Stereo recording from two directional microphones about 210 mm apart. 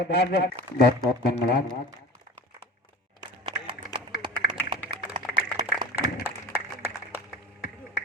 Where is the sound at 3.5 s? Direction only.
20° right (ahead or behind).